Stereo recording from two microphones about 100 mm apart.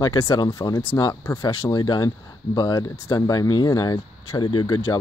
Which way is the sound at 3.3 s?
40° left (ahead or behind).